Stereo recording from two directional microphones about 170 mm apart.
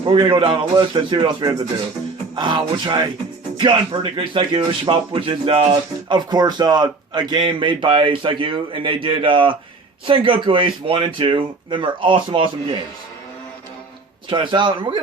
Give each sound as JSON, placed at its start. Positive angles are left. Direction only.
{"t": 0.0, "sound": "a man's voice", "side_deg": -30}
{"t": 14.3, "sound": "a man's voice", "side_deg": -30}